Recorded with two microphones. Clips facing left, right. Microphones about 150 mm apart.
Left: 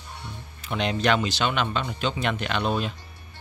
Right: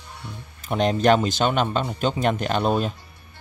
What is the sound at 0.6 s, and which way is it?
Speech, 45° right (ahead or behind).